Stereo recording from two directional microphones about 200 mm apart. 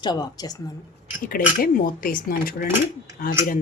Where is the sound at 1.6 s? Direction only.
45° left (ahead or behind).